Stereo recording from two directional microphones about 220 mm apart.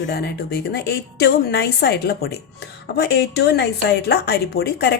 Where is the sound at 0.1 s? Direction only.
45° left (ahead or behind).